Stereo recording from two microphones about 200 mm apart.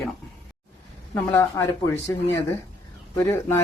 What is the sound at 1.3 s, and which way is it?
Speech, 15° left (ahead or behind).